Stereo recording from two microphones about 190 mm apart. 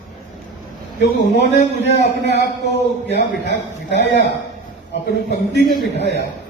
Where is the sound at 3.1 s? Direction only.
60° left (ahead or behind).